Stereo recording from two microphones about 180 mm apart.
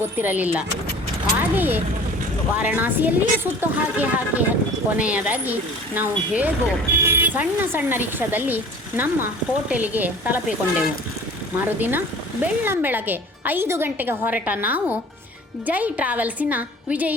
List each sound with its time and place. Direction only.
0.0 s speech: 10° right (ahead or behind)